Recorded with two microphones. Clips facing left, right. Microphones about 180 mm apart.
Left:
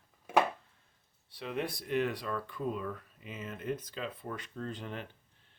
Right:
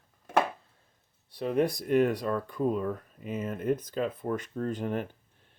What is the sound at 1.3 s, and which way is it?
Speech, 45° right (ahead or behind).